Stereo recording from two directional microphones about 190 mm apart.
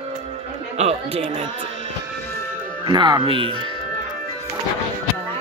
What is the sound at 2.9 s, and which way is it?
Speech, 25° right (ahead or behind).